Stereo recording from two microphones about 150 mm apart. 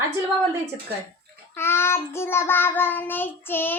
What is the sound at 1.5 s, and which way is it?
Child singing, 15° left (ahead or behind).